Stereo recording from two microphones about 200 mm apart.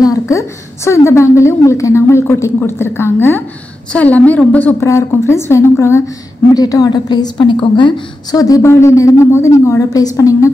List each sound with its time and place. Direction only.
0.0 s a woman's voice: 15° left (ahead or behind)